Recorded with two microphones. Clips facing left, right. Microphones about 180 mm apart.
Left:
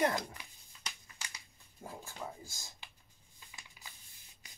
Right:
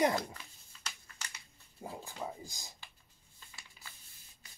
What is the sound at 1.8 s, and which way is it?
Speech, 15° right (ahead or behind).